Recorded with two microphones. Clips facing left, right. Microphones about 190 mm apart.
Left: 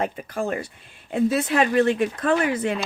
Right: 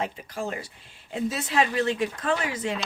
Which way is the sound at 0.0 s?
55° left (ahead or behind).